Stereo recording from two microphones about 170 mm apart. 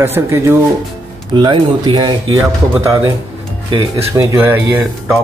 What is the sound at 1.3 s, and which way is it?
Speech, 25° right (ahead or behind).